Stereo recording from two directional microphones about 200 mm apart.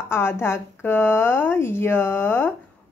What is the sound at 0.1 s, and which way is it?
Speech, 10° left (ahead or behind).